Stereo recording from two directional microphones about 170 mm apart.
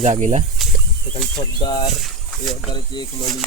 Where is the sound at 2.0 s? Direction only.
Centre (ahead or behind).